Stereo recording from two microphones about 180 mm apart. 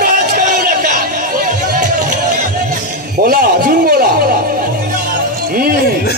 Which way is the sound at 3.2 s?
55° right (ahead or behind).